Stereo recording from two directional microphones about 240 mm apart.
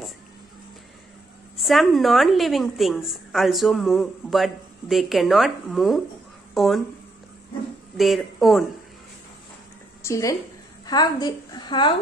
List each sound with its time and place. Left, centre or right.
1.6 s a woman's voice: centre
8.0 s a woman's voice: centre
10.0 s a woman's voice: centre